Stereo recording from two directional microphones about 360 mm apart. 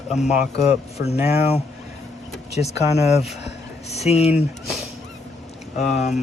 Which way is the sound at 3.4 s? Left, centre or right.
Centre.